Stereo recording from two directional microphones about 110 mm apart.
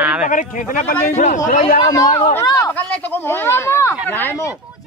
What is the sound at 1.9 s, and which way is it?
Speech, 35° left (ahead or behind).